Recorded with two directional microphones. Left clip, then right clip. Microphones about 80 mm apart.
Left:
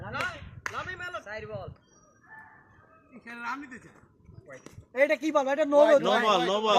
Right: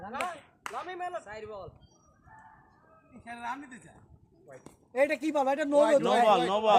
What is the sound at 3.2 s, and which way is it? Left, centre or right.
Speech, right.